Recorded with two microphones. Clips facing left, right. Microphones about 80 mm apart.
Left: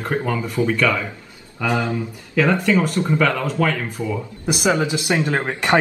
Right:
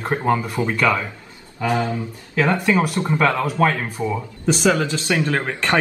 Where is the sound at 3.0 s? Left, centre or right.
Right.